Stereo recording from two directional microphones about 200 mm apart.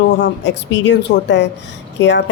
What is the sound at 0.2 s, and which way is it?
Speech, 65° left (ahead or behind).